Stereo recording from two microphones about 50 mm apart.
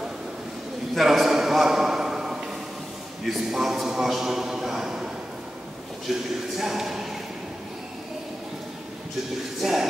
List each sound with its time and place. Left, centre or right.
0.9 s a sound: centre
3.3 s a man's voice: centre
9.6 s a man's voice: centre